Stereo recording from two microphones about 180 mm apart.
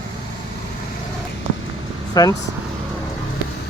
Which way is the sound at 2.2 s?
20° left (ahead or behind).